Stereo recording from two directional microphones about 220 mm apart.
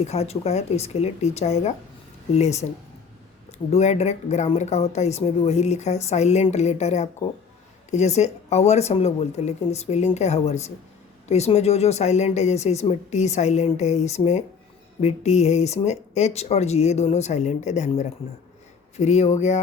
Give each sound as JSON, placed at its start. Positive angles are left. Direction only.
{"t": 0.0, "sound": "speech", "side_deg": 30}
{"t": 3.7, "sound": "speech", "side_deg": 30}